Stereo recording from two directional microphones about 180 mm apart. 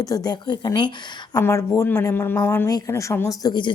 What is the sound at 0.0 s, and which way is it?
Speech, 20° left (ahead or behind).